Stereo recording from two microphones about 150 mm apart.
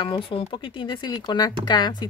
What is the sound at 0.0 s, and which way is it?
Speech, 35° left (ahead or behind).